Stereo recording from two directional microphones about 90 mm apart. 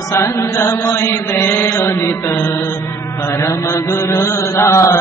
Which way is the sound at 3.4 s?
30° left (ahead or behind).